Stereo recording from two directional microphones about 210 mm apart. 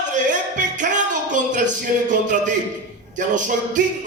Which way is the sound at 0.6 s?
35° right (ahead or behind).